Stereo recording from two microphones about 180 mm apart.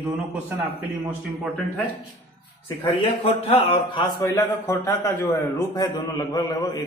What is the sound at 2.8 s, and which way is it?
A man's voice, 30° left (ahead or behind).